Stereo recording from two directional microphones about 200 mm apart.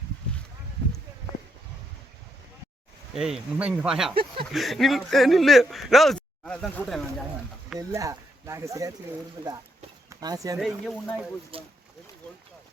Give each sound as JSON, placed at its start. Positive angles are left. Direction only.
{"t": 3.2, "sound": "speech", "side_deg": -5}
{"t": 7.8, "sound": "speech", "side_deg": -15}
{"t": 10.1, "sound": "speech", "side_deg": -20}
{"t": 10.6, "sound": "speech", "side_deg": 0}
{"t": 11.5, "sound": "speech", "side_deg": -25}